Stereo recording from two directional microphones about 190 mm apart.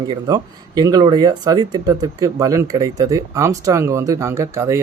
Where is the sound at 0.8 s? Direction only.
20° right (ahead or behind).